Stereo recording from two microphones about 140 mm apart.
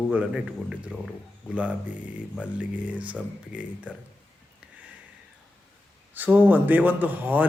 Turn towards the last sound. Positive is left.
turn(degrees=-10)  # may be behind; listen again after turning